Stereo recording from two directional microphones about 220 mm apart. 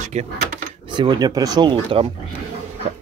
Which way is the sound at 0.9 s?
20° right (ahead or behind).